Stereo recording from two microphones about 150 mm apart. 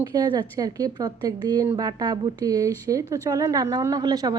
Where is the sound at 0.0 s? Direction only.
25° right (ahead or behind).